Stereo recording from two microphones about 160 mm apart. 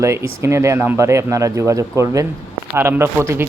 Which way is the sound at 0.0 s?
15° right (ahead or behind).